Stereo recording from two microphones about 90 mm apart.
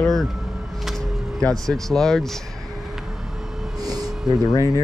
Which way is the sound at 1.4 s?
5° left (ahead or behind).